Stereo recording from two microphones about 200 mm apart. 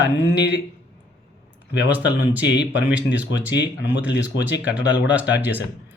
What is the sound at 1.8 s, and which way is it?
Speech, 10° right (ahead or behind).